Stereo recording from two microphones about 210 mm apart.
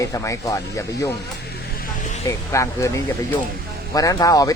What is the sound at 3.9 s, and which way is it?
Speech, 15° left (ahead or behind).